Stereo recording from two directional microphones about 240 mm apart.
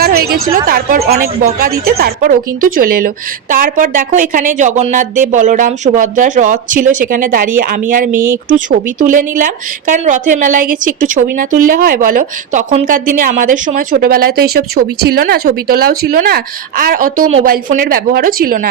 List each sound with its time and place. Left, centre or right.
0.0 s a sound: right
0.5 s speech: right
8.1 s speech: centre
8.4 s speech: right